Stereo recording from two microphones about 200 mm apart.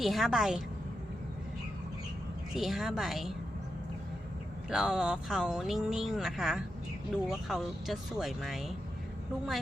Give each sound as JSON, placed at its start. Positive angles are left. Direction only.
{"t": 0.0, "sound": "speech", "side_deg": 0}
{"t": 2.6, "sound": "speech", "side_deg": 0}
{"t": 4.7, "sound": "speech", "side_deg": -5}